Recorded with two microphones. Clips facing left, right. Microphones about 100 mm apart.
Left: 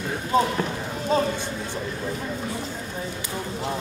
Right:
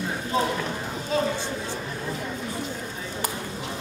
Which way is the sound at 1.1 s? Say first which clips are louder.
Left 3 dB; 40° left (ahead or behind).